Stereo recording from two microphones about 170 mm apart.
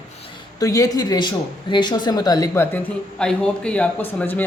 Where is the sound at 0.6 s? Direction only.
20° left (ahead or behind).